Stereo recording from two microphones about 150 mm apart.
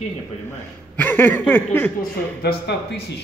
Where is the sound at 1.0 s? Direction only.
10° left (ahead or behind).